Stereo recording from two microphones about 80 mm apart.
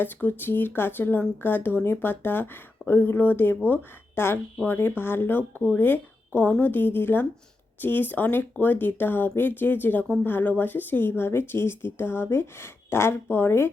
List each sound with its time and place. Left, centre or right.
0.0 s speech: left